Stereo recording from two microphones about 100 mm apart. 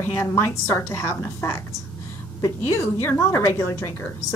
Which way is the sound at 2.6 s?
25° left (ahead or behind).